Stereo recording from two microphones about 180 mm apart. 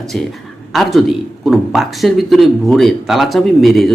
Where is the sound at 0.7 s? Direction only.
Centre (ahead or behind).